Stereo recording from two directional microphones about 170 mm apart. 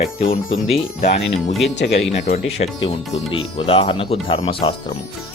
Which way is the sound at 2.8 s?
35° left (ahead or behind).